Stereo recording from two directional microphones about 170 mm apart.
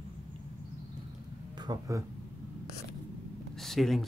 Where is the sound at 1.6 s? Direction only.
20° right (ahead or behind).